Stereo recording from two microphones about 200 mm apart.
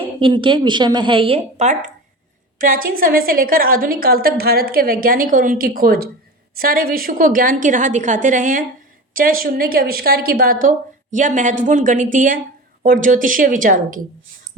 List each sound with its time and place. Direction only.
0.2 s a woman's voice: 25° right (ahead or behind); by 14.0 s 40° right (ahead or behind)